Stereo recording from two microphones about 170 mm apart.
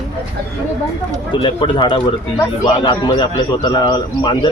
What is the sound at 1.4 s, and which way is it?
A man's voice, 30° left (ahead or behind).